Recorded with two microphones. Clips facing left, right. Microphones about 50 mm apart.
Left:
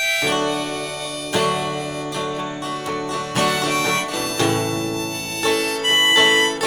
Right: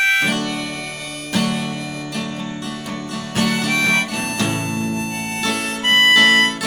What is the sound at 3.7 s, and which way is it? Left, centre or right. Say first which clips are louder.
Music: right 2 dB; right.